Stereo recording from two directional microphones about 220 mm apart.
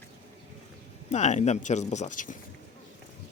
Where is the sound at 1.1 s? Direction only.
30° left (ahead or behind).